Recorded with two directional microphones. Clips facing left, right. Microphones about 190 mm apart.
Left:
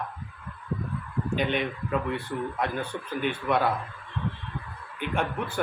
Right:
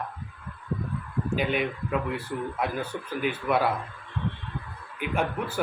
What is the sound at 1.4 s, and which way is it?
Speech, 5° right (ahead or behind).